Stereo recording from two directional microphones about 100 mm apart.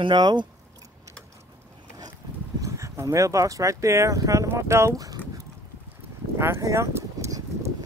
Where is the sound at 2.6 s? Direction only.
30° right (ahead or behind).